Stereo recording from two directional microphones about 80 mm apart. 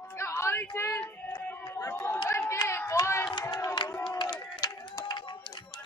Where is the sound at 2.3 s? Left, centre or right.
Left.